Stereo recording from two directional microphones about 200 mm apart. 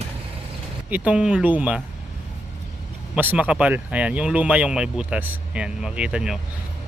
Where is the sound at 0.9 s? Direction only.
5° right (ahead or behind).